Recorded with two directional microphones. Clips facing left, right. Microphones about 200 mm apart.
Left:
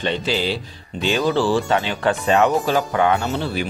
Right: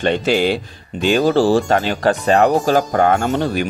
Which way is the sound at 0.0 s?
50° right (ahead or behind).